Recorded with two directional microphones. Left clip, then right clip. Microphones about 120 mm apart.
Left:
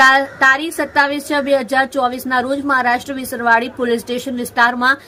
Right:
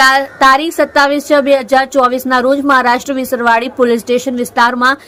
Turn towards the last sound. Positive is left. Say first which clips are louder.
# right 3 dB
turn(degrees=-35)  # may be behind; listen again after turning